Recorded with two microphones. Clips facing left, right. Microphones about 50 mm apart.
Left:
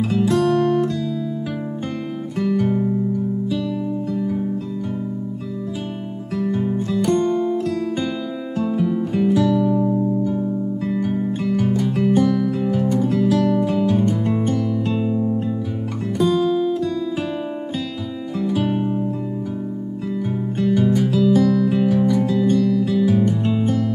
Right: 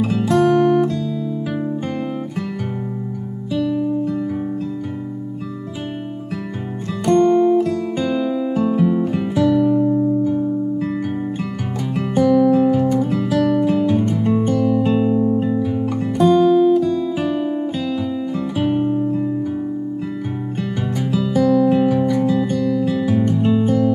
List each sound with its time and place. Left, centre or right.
0.0 s guitar: centre
7.1 s music: centre
8.5 s music: centre
11.4 s music: centre
13.3 s music: centre
18.4 s music: centre
20.6 s music: centre